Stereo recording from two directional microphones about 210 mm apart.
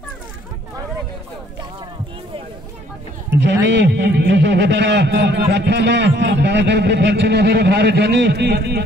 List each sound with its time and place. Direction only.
3.3 s a man's voice: 55° right (ahead or behind)